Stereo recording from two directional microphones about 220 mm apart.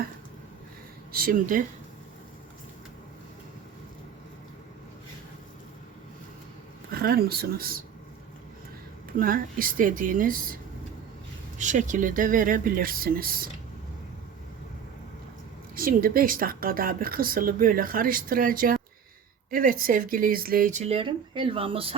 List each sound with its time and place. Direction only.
1.1 s speech: 40° right (ahead or behind)
6.9 s speech: 45° right (ahead or behind)
9.1 s speech: 40° right (ahead or behind)
15.7 s speech: 40° right (ahead or behind); by 21.9 s 25° right (ahead or behind)